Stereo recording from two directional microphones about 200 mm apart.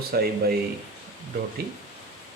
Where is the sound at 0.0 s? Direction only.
50° right (ahead or behind).